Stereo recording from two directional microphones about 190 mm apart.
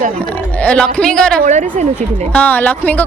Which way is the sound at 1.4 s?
40° right (ahead or behind).